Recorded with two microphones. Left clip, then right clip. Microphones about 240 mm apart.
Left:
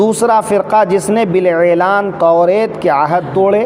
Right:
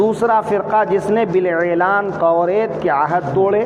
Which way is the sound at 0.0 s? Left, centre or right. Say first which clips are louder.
Left 4 dB; left.